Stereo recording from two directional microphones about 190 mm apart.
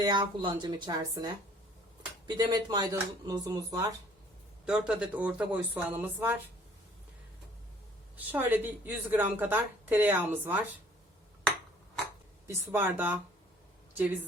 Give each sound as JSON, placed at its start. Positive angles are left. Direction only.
{"t": 0.0, "sound": "speech", "side_deg": -25}
{"t": 4.6, "sound": "a woman's voice", "side_deg": -5}
{"t": 8.1, "sound": "a woman's voice", "side_deg": -10}
{"t": 12.5, "sound": "a woman's voice", "side_deg": -10}